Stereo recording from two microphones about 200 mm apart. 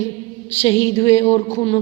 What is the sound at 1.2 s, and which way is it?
Speech, 35° left (ahead or behind).